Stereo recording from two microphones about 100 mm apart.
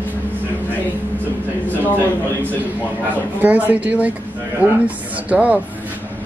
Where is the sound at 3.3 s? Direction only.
15° right (ahead or behind).